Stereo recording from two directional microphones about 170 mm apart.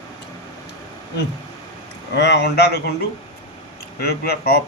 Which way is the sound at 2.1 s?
80° left.